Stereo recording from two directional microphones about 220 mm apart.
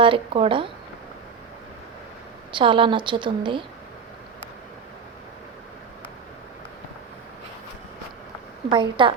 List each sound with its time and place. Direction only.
0.0 s a woman's voice: 25° right (ahead or behind)
2.5 s a woman's voice: 20° right (ahead or behind)
8.7 s a woman's voice: 25° right (ahead or behind)